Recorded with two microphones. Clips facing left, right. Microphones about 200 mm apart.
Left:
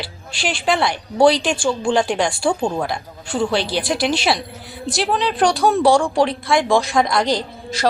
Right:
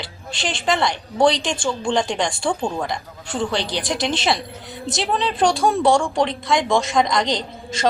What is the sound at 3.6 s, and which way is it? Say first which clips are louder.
Speech: left 3 dB; 20° right (ahead or behind).